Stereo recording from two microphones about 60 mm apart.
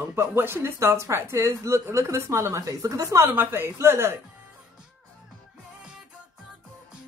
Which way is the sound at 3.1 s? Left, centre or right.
Right.